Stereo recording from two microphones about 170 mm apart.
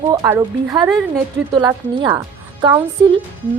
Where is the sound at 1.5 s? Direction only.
25° right (ahead or behind).